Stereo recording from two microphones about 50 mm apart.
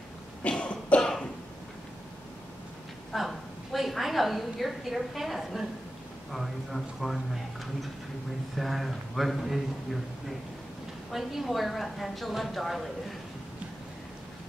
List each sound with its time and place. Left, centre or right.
0.4 s cough: left
3.1 s a woman's voice: centre
8.5 s a woman's voice: centre
11.1 s a woman's voice: centre